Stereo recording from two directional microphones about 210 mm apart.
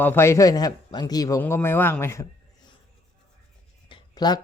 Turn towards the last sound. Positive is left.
turn(degrees=20)  # may be behind; listen again after turning